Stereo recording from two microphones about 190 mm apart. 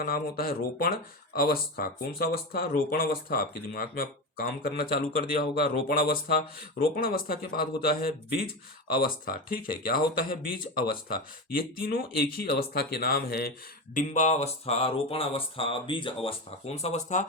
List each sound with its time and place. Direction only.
0.0 s speech: 50° left (ahead or behind)
13.9 s speech: 40° left (ahead or behind)